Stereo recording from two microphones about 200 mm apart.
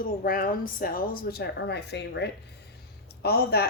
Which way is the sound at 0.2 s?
45° left (ahead or behind).